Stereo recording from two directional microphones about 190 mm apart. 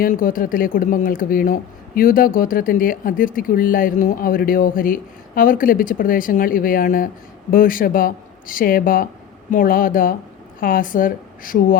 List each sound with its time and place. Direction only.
0.0 s speech: 45° left (ahead or behind)